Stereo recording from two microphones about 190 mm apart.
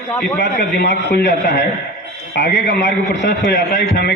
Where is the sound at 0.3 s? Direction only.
65° left (ahead or behind).